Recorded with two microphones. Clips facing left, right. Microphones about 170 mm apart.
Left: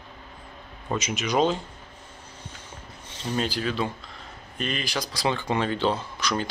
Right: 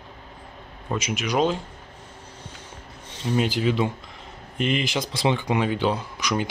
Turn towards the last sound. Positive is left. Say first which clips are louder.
# right 2 dB
turn(degrees=-15)  # may be behind; listen again after turning